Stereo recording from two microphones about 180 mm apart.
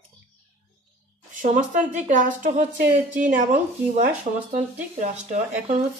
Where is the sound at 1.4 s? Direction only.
45° right (ahead or behind).